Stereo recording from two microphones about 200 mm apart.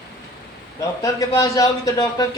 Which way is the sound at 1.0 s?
15° left (ahead or behind).